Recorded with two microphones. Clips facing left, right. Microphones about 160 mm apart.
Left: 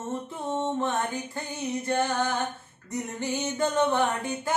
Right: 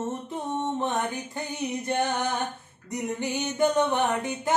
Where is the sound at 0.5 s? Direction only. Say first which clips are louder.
Left 1 dB; 15° right (ahead or behind).